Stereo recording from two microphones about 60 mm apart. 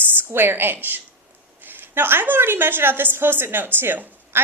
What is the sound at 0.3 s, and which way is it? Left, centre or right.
A woman's voice, right.